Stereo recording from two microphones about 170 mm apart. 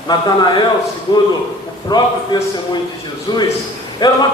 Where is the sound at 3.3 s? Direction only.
25° left (ahead or behind).